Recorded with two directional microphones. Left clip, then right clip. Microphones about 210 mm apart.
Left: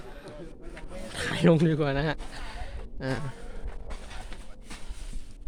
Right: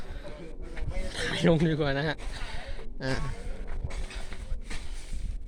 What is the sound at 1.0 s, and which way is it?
Rub, 25° left (ahead or behind).